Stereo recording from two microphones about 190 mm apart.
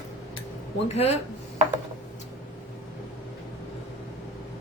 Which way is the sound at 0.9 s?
35° left (ahead or behind).